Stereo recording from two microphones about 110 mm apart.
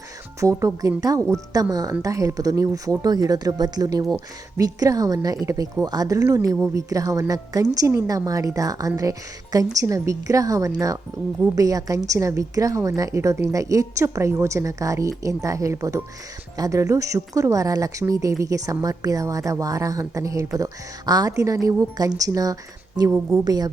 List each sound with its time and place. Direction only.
0.3 s a woman's voice: 30° right (ahead or behind)